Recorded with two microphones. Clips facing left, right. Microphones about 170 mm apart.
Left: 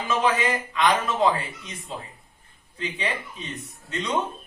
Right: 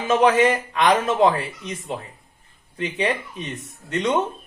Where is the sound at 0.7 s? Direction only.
70° right (ahead or behind).